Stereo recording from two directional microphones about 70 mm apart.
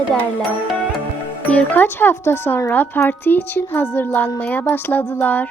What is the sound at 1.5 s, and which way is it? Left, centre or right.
Speech, left.